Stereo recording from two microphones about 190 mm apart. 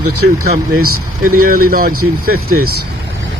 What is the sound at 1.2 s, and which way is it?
Speech, 50° right (ahead or behind).